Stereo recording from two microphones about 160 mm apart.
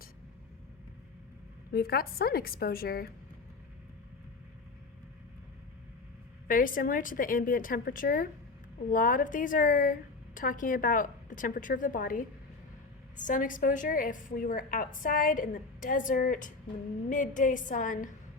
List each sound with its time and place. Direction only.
1.7 s a woman's voice: 70° left (ahead or behind)
6.5 s a woman's voice: 60° left (ahead or behind)